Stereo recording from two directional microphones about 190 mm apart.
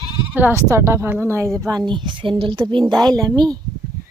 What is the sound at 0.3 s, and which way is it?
A woman's voice, 15° right (ahead or behind).